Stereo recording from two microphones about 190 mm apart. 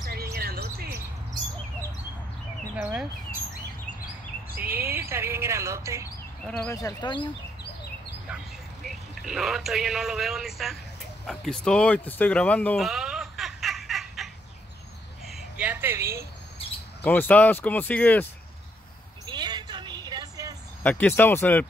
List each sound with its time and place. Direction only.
0.0 s a sound: 55° right (ahead or behind)
2.7 s speech: 5° right (ahead or behind)
4.6 s speech: 10° right (ahead or behind)
6.5 s speech: 15° left (ahead or behind)
8.8 s speech: centre (ahead or behind)
11.2 s a sound: centre (ahead or behind); by 16.3 s 15° right (ahead or behind)
17.0 s speech: 10° left (ahead or behind)
19.2 s a sound: 20° right (ahead or behind)
20.8 s speech: 10° left (ahead or behind)